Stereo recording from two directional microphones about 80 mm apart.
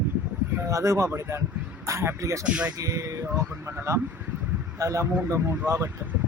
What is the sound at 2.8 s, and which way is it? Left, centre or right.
Speech, right.